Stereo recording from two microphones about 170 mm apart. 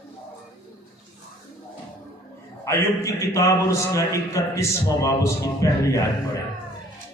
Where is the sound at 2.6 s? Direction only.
15° left (ahead or behind).